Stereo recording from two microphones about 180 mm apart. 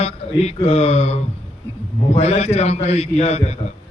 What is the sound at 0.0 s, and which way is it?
A man's voice, 35° left (ahead or behind).